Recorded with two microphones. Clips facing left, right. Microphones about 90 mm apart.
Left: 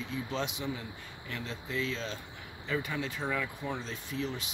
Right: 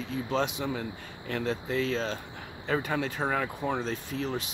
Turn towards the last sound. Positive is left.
turn(degrees=-50)  # may be behind; listen again after turning